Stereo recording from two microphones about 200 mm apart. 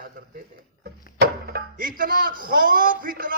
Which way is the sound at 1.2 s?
45° right (ahead or behind).